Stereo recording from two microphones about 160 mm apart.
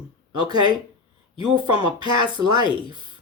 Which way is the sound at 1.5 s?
30° right (ahead or behind).